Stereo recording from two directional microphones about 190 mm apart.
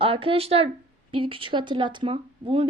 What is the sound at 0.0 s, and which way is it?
A woman's voice, 30° right (ahead or behind).